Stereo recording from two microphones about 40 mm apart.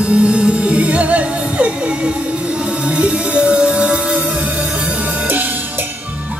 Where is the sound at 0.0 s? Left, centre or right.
Right.